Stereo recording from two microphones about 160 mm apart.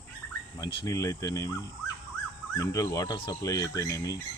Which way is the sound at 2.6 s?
20° left (ahead or behind).